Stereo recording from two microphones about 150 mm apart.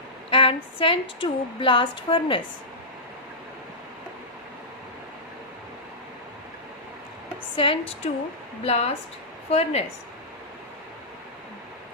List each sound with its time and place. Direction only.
0.3 s speech: 35° left (ahead or behind)
7.5 s a woman's voice: 35° left (ahead or behind)